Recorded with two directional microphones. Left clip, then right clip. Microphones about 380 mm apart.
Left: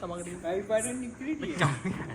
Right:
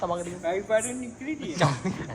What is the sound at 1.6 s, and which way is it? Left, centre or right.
Speech, centre.